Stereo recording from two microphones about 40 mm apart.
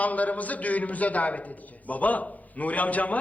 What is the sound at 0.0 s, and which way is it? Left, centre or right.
A man's voice, left.